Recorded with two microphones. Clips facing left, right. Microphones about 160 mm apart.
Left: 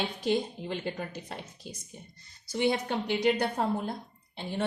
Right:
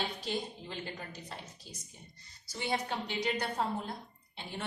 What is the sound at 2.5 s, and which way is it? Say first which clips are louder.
Speech: left 10 dB; 60° left (ahead or behind).